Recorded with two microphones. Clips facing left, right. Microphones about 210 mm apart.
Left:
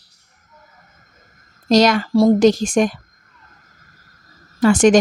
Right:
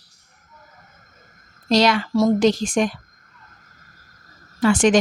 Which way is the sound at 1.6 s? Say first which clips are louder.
Left 4 dB; 45° left (ahead or behind).